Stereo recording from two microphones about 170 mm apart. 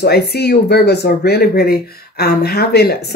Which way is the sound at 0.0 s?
70° left (ahead or behind).